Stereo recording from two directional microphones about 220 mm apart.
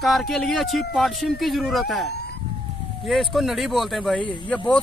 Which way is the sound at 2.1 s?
45° left (ahead or behind).